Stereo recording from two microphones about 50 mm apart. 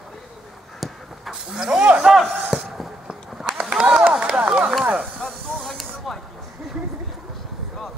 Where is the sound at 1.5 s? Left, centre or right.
Centre.